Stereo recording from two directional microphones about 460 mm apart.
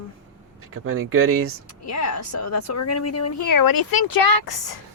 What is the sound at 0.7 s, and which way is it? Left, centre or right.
Speech, right.